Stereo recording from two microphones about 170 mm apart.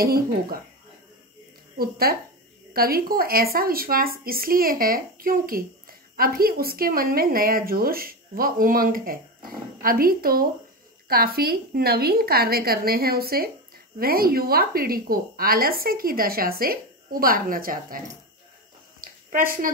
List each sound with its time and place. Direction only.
0.0 s speech: 60° right (ahead or behind)
1.8 s speech: 65° right (ahead or behind)
18.9 s a sound: 55° right (ahead or behind)